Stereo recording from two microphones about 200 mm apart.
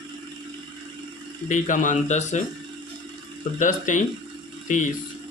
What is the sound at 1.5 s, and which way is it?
Speech, 40° left (ahead or behind).